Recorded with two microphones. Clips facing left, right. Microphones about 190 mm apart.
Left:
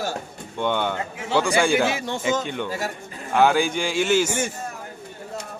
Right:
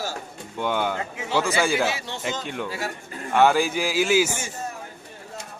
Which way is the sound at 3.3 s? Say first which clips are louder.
Even; centre (ahead or behind).